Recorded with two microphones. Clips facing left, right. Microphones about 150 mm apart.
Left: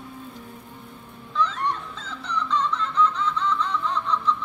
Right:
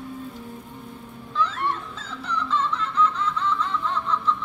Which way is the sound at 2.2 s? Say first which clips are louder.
Even; 5° right (ahead or behind).